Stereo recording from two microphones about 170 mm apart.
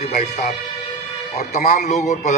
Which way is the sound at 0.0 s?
45° left (ahead or behind).